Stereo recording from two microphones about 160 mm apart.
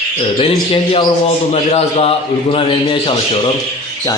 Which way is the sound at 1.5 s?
45° left (ahead or behind).